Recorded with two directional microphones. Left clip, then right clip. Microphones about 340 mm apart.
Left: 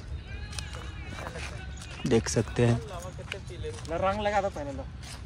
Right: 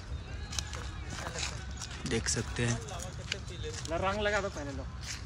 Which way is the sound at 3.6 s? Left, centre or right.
Centre.